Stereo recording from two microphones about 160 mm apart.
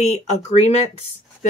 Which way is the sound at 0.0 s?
45° left (ahead or behind).